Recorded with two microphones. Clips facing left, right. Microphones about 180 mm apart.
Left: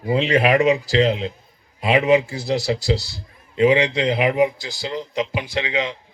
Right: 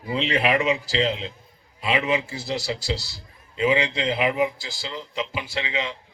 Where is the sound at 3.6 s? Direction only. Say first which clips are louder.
Left 5 dB; 40° left (ahead or behind).